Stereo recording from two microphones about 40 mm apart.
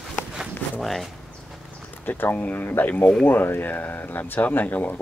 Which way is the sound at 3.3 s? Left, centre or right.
Left.